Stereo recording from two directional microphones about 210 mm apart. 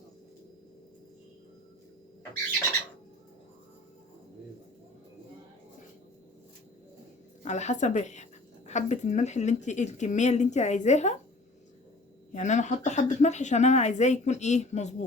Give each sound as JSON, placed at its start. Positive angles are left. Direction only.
{"t": 7.4, "sound": "speech", "side_deg": 35}
{"t": 12.3, "sound": "speech", "side_deg": 35}